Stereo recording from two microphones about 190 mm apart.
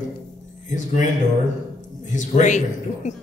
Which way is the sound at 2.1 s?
40° left (ahead or behind).